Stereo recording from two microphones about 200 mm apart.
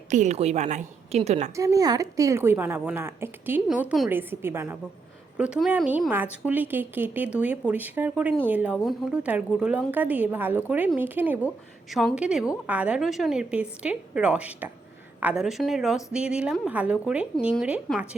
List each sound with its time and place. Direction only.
0.1 s a woman's voice: 35° right (ahead or behind)
1.5 s a woman's voice: 15° right (ahead or behind)